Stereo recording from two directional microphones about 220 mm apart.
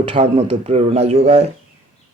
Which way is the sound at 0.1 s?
30° right (ahead or behind).